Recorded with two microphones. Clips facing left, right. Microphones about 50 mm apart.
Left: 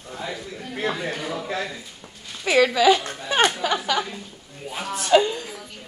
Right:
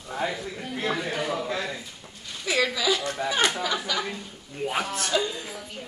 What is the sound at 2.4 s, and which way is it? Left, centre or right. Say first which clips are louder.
Speech: left 8 dB; left.